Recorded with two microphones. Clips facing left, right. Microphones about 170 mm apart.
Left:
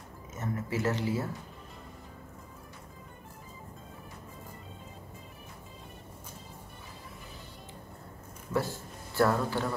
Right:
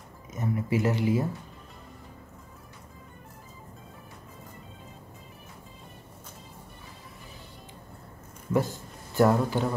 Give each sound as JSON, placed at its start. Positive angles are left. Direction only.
{"t": 0.3, "sound": "speech", "side_deg": -15}
{"t": 8.5, "sound": "a man's voice", "side_deg": -20}